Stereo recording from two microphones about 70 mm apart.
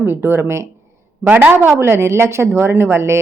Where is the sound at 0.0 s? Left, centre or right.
Right.